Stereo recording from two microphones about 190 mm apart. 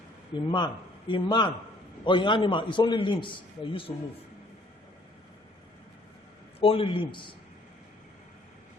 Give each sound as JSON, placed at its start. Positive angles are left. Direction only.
{"t": 0.3, "sound": "a man's voice", "side_deg": 25}
{"t": 6.6, "sound": "a man's voice", "side_deg": 30}